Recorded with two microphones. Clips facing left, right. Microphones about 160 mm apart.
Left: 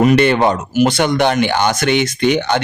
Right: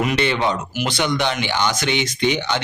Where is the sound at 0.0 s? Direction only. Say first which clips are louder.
Left 8 dB; 50° left (ahead or behind).